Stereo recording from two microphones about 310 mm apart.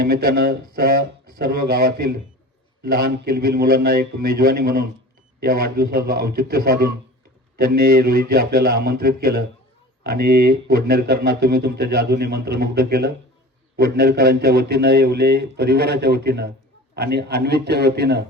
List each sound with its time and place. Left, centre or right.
0.0 s a man's voice: right